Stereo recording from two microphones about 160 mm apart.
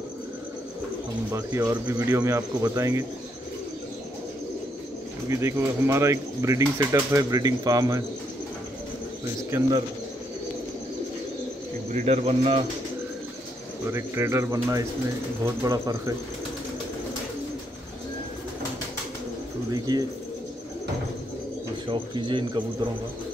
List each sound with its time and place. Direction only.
1.3 s speech: 20° right (ahead or behind)
5.3 s speech: 20° right (ahead or behind)
11.9 s speech: 45° right (ahead or behind)
13.9 s speech: 15° right (ahead or behind)
19.7 s speech: 25° right (ahead or behind)
21.8 s speech: 30° right (ahead or behind)